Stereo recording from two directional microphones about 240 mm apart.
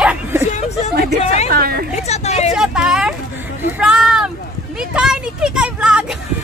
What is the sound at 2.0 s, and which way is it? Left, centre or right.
Speech, left.